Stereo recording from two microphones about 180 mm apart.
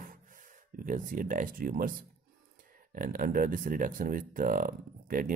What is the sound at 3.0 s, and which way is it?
Speech, 50° right (ahead or behind).